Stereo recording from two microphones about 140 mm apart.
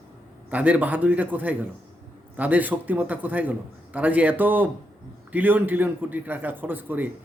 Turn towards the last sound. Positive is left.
turn(degrees=-15)  # may be behind; listen again after turning